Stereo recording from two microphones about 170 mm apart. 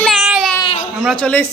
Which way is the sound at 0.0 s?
Centre (ahead or behind).